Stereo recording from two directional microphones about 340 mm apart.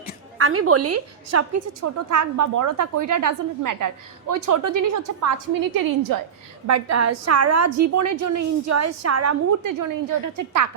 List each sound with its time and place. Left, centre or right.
0.3 s a woman's voice: right
5.7 s a woman's voice: right
6.7 s a woman's voice: right
9.6 s a woman's voice: right